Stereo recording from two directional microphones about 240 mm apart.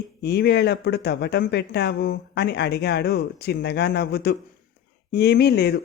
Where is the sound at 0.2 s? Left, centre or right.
Left.